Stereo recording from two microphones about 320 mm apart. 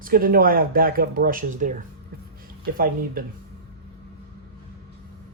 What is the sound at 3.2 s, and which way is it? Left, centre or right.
Speech, right.